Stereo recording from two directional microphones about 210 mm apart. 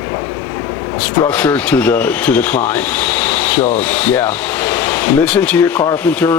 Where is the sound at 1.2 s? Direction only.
5° left (ahead or behind).